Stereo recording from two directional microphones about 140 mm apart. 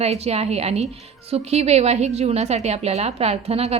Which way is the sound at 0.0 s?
50° right (ahead or behind).